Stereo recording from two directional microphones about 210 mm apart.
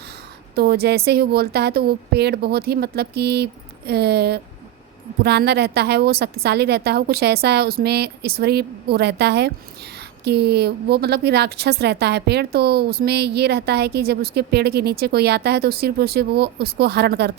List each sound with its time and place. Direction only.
0.5 s a woman's voice: 50° right (ahead or behind)